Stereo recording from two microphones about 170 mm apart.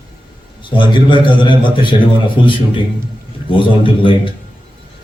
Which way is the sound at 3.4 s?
30° left (ahead or behind).